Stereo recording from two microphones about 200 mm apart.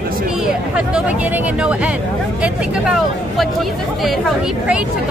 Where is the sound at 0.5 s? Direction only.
5° right (ahead or behind).